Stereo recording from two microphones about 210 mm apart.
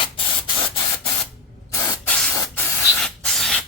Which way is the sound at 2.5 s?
5° left (ahead or behind).